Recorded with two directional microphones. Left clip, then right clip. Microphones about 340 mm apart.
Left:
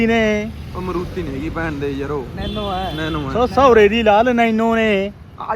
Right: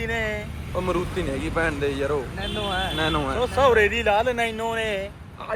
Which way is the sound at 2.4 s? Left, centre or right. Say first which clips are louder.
Left 3 dB; left.